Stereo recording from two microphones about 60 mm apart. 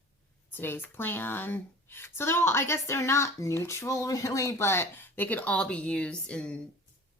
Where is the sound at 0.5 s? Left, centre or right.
Left; by 6.6 s centre.